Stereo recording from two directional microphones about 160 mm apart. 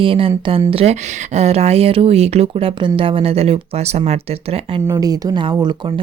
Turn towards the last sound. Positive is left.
turn(degrees=-30)  # may be behind; listen again after turning